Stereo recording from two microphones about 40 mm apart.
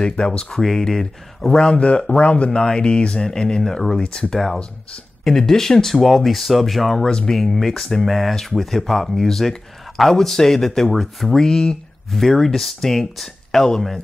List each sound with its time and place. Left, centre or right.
0.1 s speech: left
1.7 s speech: left
2.5 s speech: centre
7.1 s speech: centre
7.3 s speech: centre
11.3 s speech: centre
12.1 s speech: centre